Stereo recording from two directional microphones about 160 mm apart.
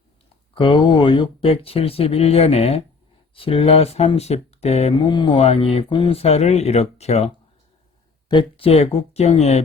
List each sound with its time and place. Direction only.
0.5 s speech: 30° left (ahead or behind)
5.0 s speech: 30° left (ahead or behind)
8.3 s speech: 30° left (ahead or behind)